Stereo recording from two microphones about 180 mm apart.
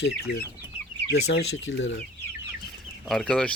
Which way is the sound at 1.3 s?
90° left.